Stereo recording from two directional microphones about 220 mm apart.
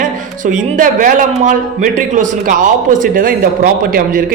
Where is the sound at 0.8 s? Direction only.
35° right (ahead or behind).